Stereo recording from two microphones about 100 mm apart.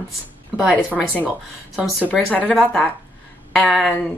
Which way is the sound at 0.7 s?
15° left (ahead or behind).